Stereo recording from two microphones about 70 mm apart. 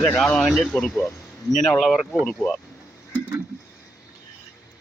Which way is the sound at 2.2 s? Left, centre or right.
Centre.